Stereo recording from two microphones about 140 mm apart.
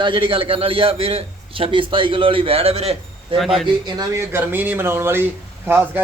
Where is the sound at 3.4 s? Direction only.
Centre (ahead or behind).